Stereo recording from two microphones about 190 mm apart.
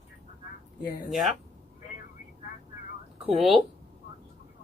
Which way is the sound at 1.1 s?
Centre (ahead or behind).